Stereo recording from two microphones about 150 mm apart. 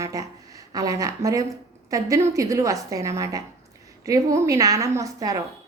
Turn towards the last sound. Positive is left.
turn(degrees=-25)  # may be behind; listen again after turning